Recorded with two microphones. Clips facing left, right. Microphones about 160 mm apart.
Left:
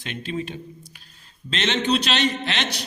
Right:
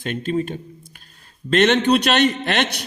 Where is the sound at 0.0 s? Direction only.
50° right (ahead or behind).